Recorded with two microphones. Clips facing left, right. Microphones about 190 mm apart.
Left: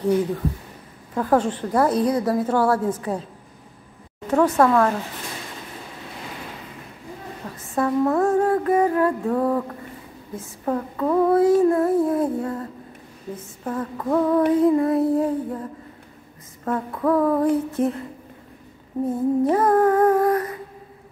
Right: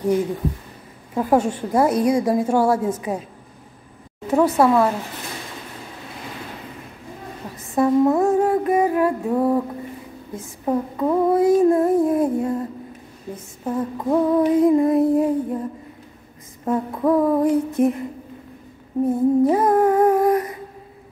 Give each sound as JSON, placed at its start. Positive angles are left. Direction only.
{"t": 1.1, "sound": "female singing", "side_deg": -10}
{"t": 4.3, "sound": "female singing", "side_deg": -10}
{"t": 7.7, "sound": "female singing", "side_deg": -15}
{"t": 13.7, "sound": "female singing", "side_deg": -15}
{"t": 16.6, "sound": "female singing", "side_deg": -15}
{"t": 19.4, "sound": "female singing", "side_deg": -15}